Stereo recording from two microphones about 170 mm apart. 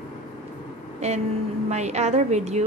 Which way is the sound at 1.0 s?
40° right (ahead or behind).